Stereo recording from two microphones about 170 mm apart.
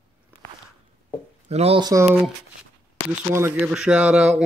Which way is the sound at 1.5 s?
35° right (ahead or behind).